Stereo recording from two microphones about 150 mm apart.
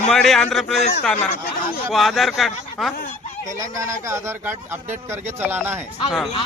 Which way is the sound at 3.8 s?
20° right (ahead or behind).